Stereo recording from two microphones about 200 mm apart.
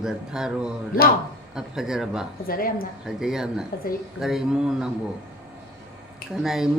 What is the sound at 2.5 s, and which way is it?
Speech, 45° left (ahead or behind).